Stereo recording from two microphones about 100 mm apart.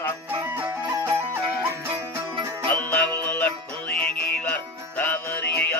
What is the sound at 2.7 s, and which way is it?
Music, 15° left (ahead or behind).